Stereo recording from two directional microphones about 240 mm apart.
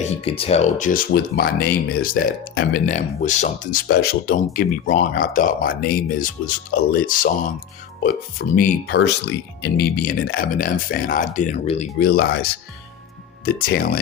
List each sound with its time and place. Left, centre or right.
0.0 s speech: left
11.9 s speech: left